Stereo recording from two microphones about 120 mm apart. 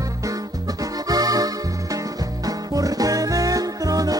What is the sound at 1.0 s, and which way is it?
Music, 30° right (ahead or behind).